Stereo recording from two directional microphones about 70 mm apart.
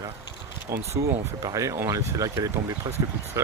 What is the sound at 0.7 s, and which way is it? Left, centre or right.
Speech, right.